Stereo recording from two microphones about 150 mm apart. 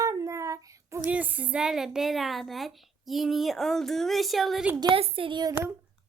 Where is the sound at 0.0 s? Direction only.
20° right (ahead or behind).